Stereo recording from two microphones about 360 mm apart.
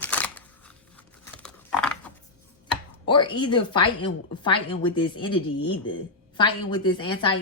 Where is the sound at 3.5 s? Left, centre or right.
Centre.